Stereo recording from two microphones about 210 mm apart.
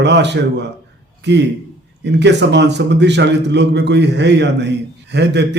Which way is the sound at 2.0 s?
55° right (ahead or behind).